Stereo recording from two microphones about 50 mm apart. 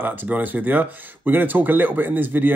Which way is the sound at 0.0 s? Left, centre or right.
Right.